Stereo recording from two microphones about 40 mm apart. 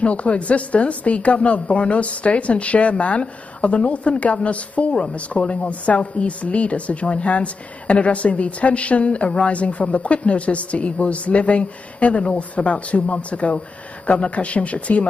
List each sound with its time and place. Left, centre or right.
0.0 s a woman's voice: left